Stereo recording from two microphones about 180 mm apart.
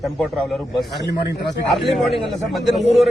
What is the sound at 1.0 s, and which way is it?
Speech, 70° left (ahead or behind).